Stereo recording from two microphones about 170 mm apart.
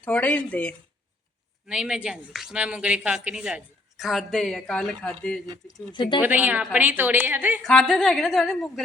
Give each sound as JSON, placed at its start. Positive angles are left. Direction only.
{"t": 0.0, "sound": "speech", "side_deg": 10}
{"t": 1.6, "sound": "speech", "side_deg": -5}
{"t": 5.9, "sound": "speech", "side_deg": 25}
{"t": 6.2, "sound": "a woman's voice", "side_deg": -10}
{"t": 7.6, "sound": "speech", "side_deg": 0}